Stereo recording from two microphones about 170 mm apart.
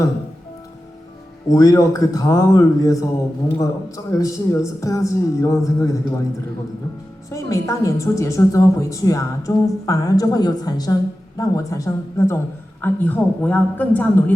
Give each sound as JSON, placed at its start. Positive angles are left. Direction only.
{"t": 1.5, "sound": "a woman's voice", "side_deg": 20}
{"t": 7.3, "sound": "a woman's voice", "side_deg": 20}